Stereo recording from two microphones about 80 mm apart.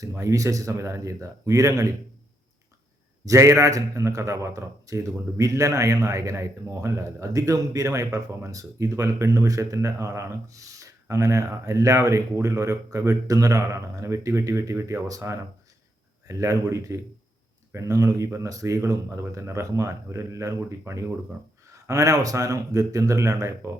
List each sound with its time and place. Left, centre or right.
0.0 s a man's voice: right
3.2 s a man's voice: right